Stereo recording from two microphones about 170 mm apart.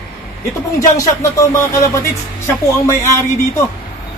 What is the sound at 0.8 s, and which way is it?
Speech, 20° left (ahead or behind).